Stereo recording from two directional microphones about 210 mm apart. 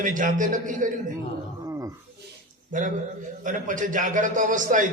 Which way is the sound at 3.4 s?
40° right (ahead or behind).